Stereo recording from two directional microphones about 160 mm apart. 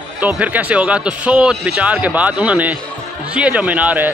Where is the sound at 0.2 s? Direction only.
10° right (ahead or behind).